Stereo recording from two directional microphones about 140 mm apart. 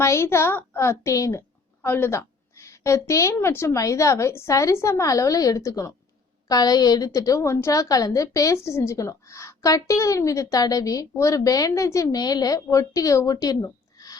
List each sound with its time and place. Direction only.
0.0 s a woman's voice: 20° left (ahead or behind)